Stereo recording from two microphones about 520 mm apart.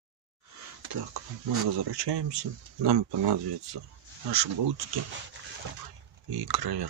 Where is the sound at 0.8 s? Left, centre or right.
Right.